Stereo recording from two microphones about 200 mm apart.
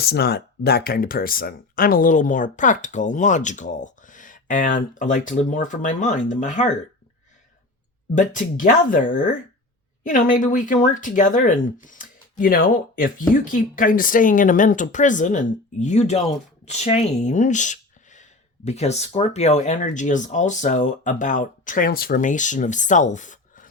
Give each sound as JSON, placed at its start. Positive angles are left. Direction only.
{"t": 0.0, "sound": "speech", "side_deg": 50}
{"t": 8.1, "sound": "speech", "side_deg": 40}